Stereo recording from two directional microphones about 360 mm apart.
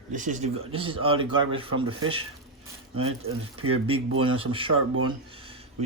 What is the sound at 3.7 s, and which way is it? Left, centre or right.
Speech, centre.